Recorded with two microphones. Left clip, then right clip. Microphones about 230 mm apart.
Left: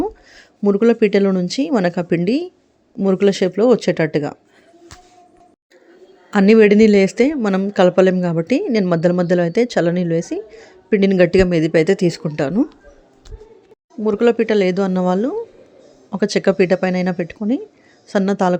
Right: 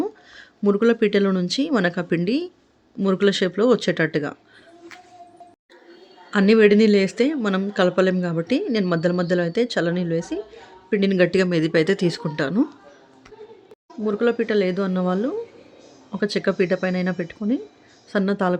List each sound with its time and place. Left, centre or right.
0.0 s speech: centre
6.3 s speech: left
14.0 s speech: left